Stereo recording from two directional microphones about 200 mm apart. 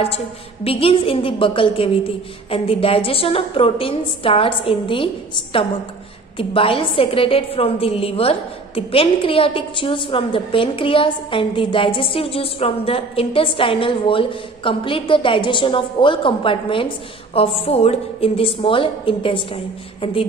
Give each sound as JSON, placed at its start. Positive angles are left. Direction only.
{"t": 0.7, "sound": "a woman's voice", "side_deg": 30}